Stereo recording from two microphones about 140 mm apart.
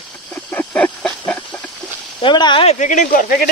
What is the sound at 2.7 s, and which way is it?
Speech, 65° left (ahead or behind).